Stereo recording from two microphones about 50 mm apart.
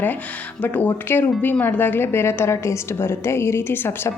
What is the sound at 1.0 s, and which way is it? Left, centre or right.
A woman's voice, left.